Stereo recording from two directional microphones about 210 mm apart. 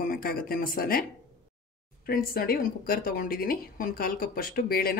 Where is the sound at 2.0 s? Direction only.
45° left (ahead or behind).